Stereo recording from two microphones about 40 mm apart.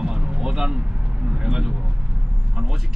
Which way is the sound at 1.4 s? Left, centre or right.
Centre.